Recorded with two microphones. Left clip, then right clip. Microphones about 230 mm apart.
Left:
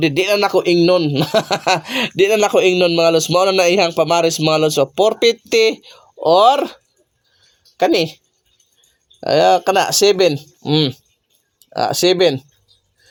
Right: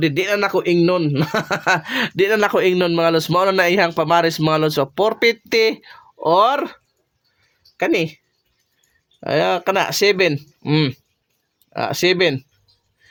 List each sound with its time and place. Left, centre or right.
0.0 s speech: centre
9.2 s speech: centre